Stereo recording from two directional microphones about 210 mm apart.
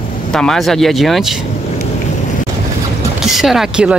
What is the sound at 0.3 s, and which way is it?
Speech, centre (ahead or behind).